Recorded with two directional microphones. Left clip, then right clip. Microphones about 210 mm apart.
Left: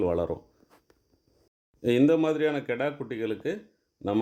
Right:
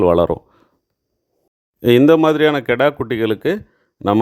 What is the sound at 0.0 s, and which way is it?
Speech, 40° right (ahead or behind).